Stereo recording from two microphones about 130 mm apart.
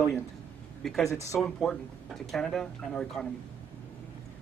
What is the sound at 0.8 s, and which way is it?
Speech, centre (ahead or behind).